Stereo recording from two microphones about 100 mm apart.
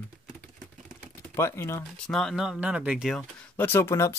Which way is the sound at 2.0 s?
5° left (ahead or behind).